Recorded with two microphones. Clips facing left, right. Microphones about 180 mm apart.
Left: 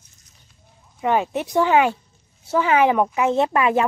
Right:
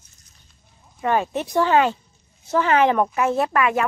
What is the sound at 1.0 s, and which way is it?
Speech, 15° left (ahead or behind).